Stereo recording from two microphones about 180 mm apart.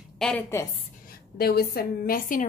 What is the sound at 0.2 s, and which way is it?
Speech, 5° left (ahead or behind).